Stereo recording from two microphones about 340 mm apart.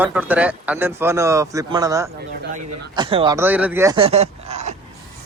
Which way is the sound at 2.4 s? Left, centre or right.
Right.